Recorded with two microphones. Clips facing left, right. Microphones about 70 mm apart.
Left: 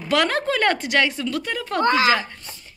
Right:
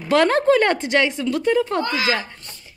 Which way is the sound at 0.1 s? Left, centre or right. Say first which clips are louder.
Right 5 dB; right.